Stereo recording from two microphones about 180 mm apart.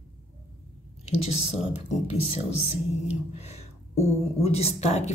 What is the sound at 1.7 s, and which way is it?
Speech, 35° left (ahead or behind).